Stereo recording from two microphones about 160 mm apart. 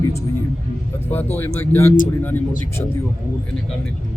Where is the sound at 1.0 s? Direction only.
15° left (ahead or behind).